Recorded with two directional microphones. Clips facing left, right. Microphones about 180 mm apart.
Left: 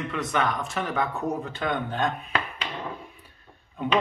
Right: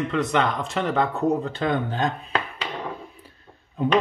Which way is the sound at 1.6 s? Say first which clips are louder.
Right 3 dB; 25° right (ahead or behind).